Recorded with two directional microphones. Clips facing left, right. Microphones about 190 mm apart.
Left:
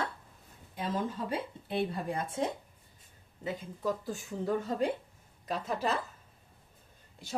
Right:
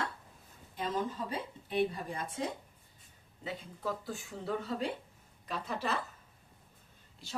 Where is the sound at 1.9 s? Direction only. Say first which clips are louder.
Left 5 dB; 50° left (ahead or behind).